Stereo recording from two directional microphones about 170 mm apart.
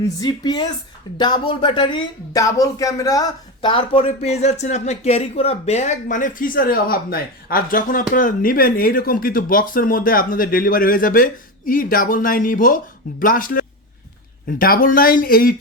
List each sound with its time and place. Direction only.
0.0 s speech: 20° left (ahead or behind); by 15.5 s 60° left (ahead or behind)